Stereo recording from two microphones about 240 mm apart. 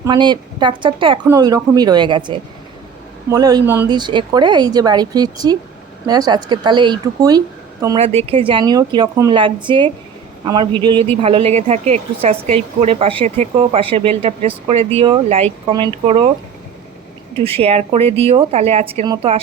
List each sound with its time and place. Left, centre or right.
0.0 s a woman's voice: centre
7.9 s a woman's voice: right
17.6 s a woman's voice: right